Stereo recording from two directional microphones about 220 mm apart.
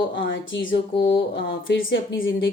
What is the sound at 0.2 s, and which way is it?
Speech, 55° left (ahead or behind).